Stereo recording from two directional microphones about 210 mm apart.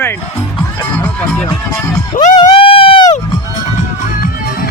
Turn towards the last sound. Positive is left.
turn(degrees=25)  # may be behind; listen again after turning